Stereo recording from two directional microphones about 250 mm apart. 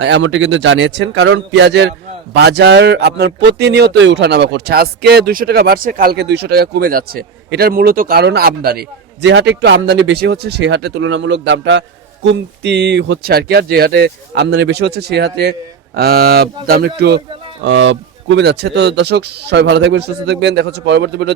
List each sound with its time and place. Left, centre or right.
0.0 s a man's voice: right